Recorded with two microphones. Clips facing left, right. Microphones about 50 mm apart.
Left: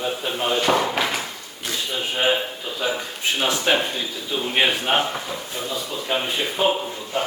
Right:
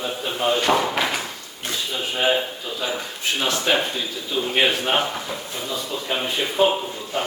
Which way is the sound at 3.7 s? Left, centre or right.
Centre.